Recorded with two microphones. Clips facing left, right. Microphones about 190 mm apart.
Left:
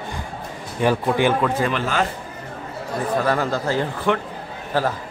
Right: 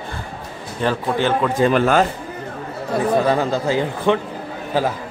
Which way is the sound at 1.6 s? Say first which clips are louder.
Right 6 dB; 25° right (ahead or behind).